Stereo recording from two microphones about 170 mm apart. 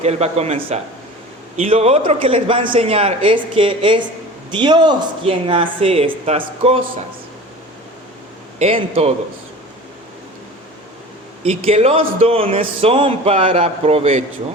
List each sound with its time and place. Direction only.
0.0 s speech: 40° right (ahead or behind)
8.5 s speech: 35° right (ahead or behind)
11.4 s speech: 35° right (ahead or behind)